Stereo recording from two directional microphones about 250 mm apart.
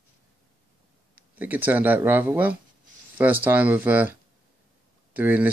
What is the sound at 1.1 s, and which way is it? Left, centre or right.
Speech, centre.